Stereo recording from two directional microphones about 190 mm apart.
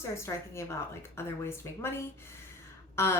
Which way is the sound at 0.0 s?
15° left (ahead or behind).